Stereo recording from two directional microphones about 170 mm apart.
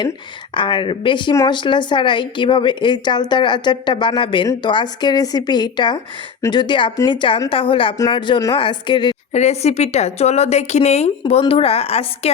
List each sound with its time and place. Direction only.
0.5 s speech: 30° left (ahead or behind)
9.3 s a woman's voice: 40° left (ahead or behind)